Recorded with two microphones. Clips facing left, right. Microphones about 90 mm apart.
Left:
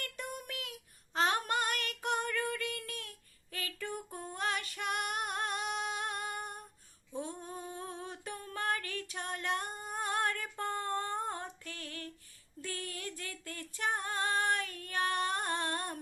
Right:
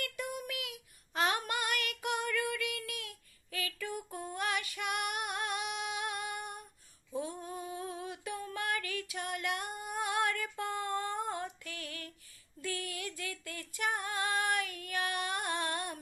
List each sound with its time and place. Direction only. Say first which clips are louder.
0.5 s child singing: right 2 dB; 35° left (ahead or behind)
3.5 s a sound: right 1 dB; 40° left (ahead or behind)
4.3 s female singing: even; 35° left (ahead or behind)